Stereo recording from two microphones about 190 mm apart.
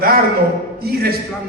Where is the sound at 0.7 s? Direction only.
55° right (ahead or behind).